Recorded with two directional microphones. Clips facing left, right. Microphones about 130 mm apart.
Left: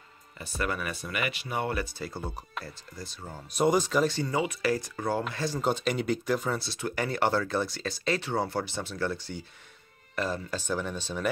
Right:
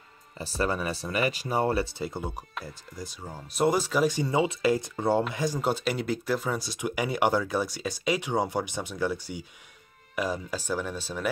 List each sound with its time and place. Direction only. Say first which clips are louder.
0.4 s speech: right 4 dB; 30° right (ahead or behind)
5.3 s speech: right 1 dB; 15° right (ahead or behind)